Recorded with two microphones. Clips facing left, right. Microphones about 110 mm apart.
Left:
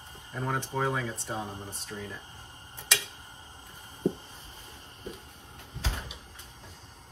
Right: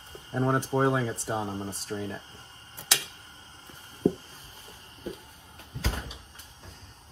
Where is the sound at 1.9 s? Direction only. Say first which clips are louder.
Right 6 dB; 40° right (ahead or behind).